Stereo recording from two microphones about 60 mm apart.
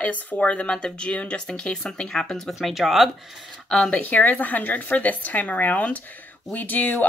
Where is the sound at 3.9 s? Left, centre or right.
Left.